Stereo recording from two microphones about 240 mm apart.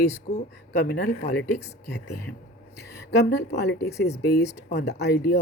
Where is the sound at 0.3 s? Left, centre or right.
Left.